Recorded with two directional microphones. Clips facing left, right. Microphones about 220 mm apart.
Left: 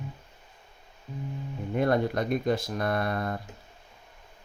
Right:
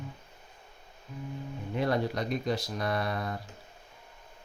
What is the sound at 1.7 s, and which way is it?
Speech, 50° left (ahead or behind).